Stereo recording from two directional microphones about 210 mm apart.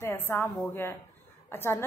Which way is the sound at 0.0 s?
10° left (ahead or behind).